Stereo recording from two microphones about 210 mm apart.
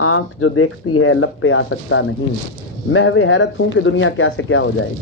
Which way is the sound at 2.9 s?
80° left.